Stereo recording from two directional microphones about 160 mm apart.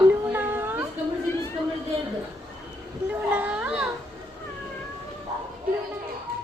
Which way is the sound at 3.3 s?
10° right (ahead or behind).